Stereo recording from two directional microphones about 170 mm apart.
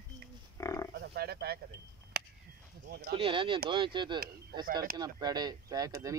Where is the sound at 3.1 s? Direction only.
30° right (ahead or behind).